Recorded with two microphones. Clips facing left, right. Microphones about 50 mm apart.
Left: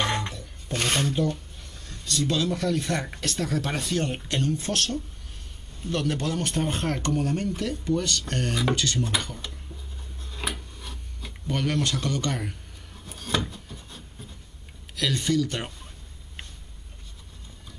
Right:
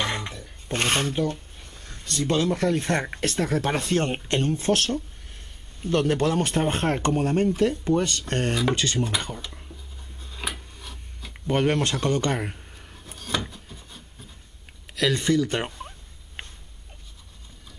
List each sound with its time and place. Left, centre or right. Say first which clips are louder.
0.0 s a sound: left 1 dB; centre
0.7 s speech: right 2 dB; right
5.9 s speech: right 5 dB; right
10.2 s a sound: even; centre
11.4 s speech: right 4 dB; right
13.0 s wood: left 1 dB; centre
15.0 s speech: right 3 dB; centre
15.4 s speech: right 5 dB; right